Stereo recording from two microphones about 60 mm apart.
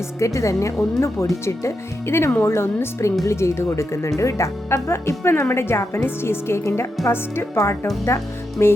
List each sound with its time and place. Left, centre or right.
0.2 s a woman's voice: left